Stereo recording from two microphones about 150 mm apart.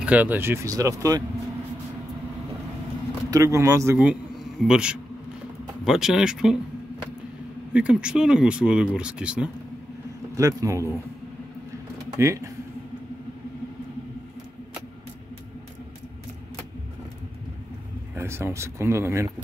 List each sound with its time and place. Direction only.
0.0 s speech: 10° right (ahead or behind)
3.3 s speech: 20° right (ahead or behind); by 6.5 s 5° right (ahead or behind)
7.7 s speech: 5° right (ahead or behind)
10.3 s speech: 20° right (ahead or behind)
12.2 s speech: 20° right (ahead or behind)
18.1 s speech: 15° right (ahead or behind)